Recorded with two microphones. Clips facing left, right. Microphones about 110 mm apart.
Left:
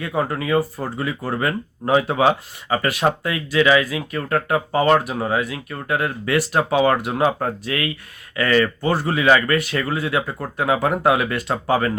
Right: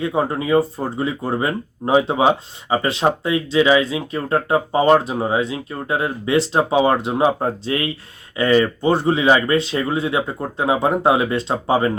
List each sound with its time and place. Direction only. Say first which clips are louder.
0.0 s speech: right 3 dB; 25° right (ahead or behind)